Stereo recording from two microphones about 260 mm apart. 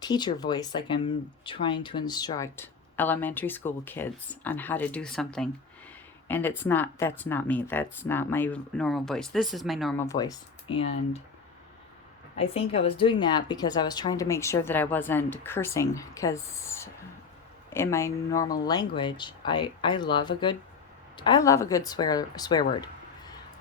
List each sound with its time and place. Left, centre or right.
0.0 s speech: centre
10.1 s speech: centre
12.4 s speech: left
22.7 s a sound: centre